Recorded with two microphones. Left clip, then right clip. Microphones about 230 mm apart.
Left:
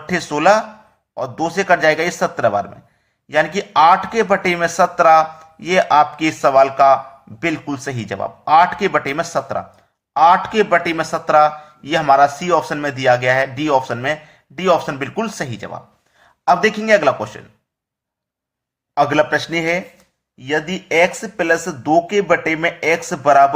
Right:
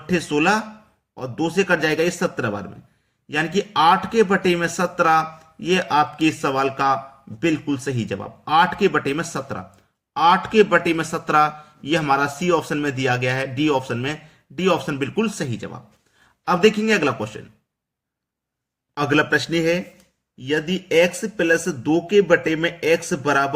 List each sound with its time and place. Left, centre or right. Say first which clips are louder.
0.1 s speech: left 5 dB; centre
10.7 s speech: left 3 dB; centre
16.5 s speech: left 4 dB; centre
18.9 s speech: left 4 dB; centre